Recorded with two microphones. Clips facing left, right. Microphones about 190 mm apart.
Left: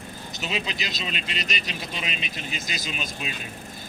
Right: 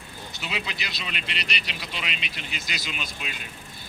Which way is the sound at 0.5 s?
20° left (ahead or behind).